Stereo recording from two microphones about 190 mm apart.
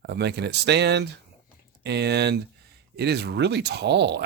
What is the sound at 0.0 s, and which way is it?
Speech, 60° right (ahead or behind).